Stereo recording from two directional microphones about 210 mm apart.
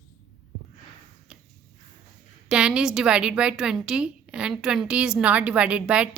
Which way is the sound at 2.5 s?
5° right (ahead or behind).